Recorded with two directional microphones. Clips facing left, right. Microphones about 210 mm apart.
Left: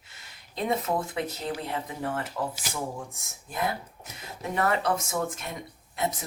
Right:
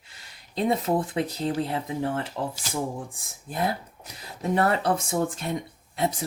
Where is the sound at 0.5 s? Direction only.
30° right (ahead or behind).